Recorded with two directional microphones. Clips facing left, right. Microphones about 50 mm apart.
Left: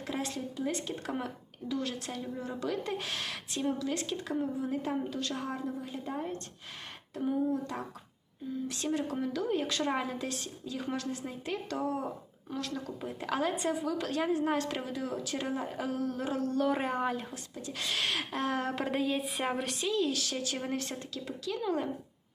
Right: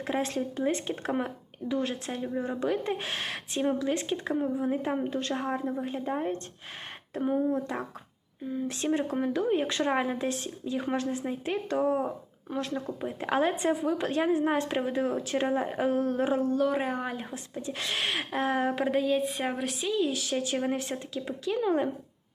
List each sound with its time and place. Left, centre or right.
0.1 s speech: right
5.7 s speech: right
16.6 s speech: centre
17.2 s speech: right